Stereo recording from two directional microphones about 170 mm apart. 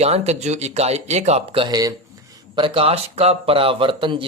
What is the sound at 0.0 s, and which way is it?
A man's voice, 40° right (ahead or behind).